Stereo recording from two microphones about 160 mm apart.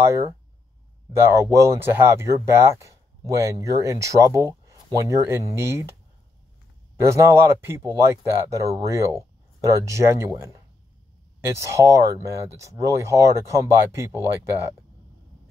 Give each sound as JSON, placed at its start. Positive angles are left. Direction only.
{"t": 0.0, "sound": "speech", "side_deg": -20}
{"t": 7.0, "sound": "speech", "side_deg": -20}
{"t": 11.5, "sound": "speech", "side_deg": -20}